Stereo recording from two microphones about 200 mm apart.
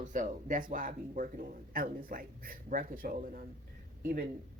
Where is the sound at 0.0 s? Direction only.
40° right (ahead or behind).